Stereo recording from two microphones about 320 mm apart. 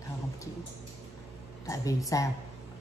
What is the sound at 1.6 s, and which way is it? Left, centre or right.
Speech, centre.